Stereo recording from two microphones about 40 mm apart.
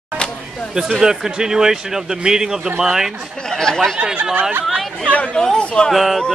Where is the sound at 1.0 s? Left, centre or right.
Centre.